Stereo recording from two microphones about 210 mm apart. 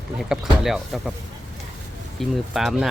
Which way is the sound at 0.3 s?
Centre (ahead or behind).